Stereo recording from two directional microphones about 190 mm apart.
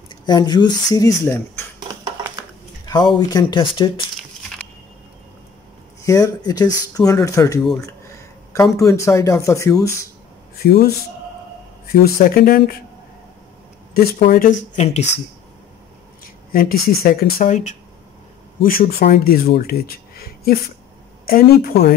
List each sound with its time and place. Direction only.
0.1 s speech: 20° left (ahead or behind)
3.2 s speech: 20° left (ahead or behind)
6.0 s speech: 15° left (ahead or behind)
8.9 s speech: 15° left (ahead or behind)
10.6 s a man's voice: 55° left (ahead or behind)
11.9 s speech: 50° left (ahead or behind)
13.9 s speech: 55° left (ahead or behind)
14.8 s speech: 35° left (ahead or behind)
16.5 s speech: 50° left (ahead or behind)